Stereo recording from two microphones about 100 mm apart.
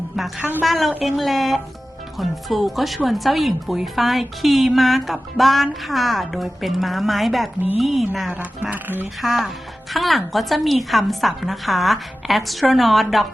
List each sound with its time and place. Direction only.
0.3 s a woman's voice: 20° right (ahead or behind)
0.6 s speech: centre (ahead or behind)
8.3 s speech: 15° right (ahead or behind)
9.2 s speech: centre (ahead or behind)